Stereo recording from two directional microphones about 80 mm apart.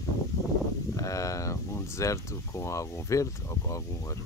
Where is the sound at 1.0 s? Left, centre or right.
Left.